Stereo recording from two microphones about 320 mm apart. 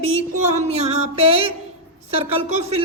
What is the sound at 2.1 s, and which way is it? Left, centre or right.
Speech, centre.